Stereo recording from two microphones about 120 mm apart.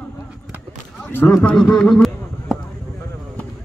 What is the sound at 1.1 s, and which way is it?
A man's voice, 15° left (ahead or behind).